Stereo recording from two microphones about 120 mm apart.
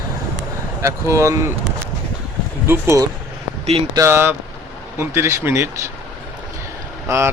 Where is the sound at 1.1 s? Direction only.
25° right (ahead or behind).